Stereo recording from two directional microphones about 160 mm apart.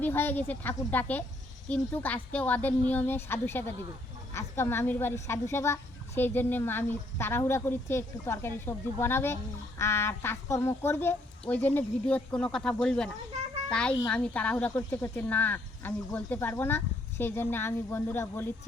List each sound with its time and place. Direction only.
0.0 s a woman's voice: 10° left (ahead or behind)